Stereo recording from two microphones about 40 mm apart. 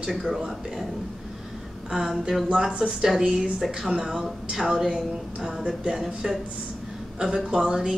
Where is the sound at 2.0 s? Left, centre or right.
Centre.